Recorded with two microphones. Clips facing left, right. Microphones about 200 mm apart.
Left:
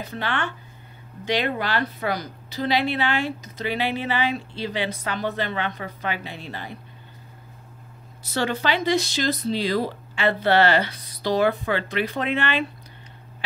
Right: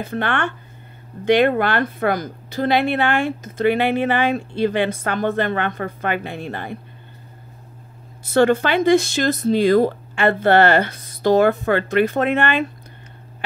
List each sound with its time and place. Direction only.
0.1 s a woman's voice: 55° right (ahead or behind)
8.3 s a woman's voice: 50° right (ahead or behind)